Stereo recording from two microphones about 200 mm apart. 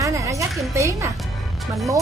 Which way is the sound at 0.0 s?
15° right (ahead or behind).